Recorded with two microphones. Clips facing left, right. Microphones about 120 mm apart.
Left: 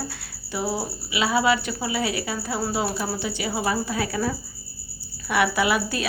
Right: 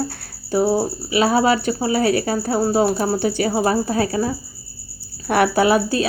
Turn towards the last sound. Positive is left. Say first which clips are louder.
# right 7 dB
turn(degrees=-35)  # may be behind; listen again after turning